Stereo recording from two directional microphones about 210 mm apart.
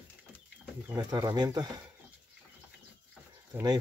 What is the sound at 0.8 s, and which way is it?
Speech, 20° right (ahead or behind).